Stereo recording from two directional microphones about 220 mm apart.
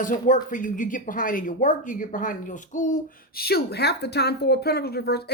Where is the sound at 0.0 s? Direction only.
35° left (ahead or behind).